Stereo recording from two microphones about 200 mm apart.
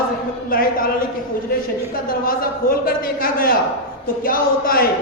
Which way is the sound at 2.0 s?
45° left (ahead or behind).